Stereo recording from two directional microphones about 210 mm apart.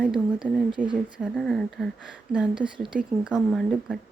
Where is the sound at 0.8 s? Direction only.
40° right (ahead or behind).